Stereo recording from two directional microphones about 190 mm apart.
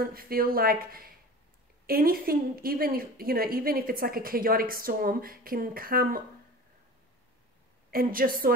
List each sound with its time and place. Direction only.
0.0 s a woman's voice: 50° right (ahead or behind)
7.9 s a woman's voice: 50° right (ahead or behind)